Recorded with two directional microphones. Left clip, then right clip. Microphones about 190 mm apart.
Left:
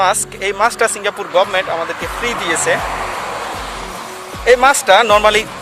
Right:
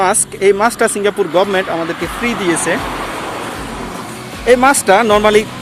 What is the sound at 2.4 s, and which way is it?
Speech, 25° left (ahead or behind).